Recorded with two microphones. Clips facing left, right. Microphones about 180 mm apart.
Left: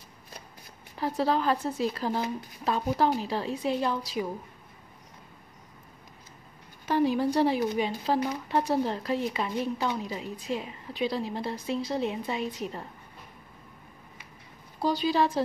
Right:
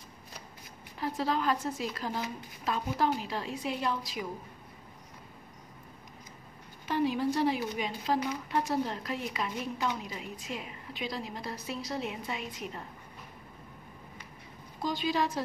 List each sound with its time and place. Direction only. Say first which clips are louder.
1.0 s speech: left 4 dB; 35° left (ahead or behind)
6.9 s speech: left 4 dB; 40° left (ahead or behind)
14.8 s speech: left 5 dB; 35° left (ahead or behind)